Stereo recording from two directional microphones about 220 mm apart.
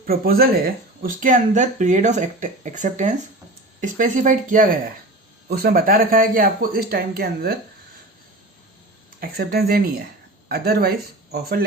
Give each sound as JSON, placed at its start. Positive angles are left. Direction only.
{"t": 0.0, "sound": "speech", "side_deg": -40}
{"t": 9.2, "sound": "speech", "side_deg": -45}